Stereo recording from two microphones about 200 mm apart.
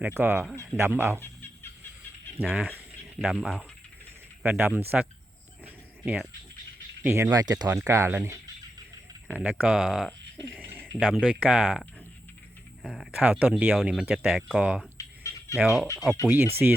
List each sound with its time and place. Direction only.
0.0 s speech: 10° right (ahead or behind)
2.4 s speech: 5° right (ahead or behind)
7.0 s speech: 10° right (ahead or behind)
10.4 s a sound: centre (ahead or behind)
11.2 s speech: 5° right (ahead or behind)
14.9 s fowl: 15° left (ahead or behind)
15.5 s speech: centre (ahead or behind)